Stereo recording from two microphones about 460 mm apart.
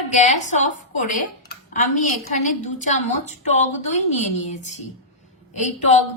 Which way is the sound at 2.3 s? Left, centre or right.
Centre.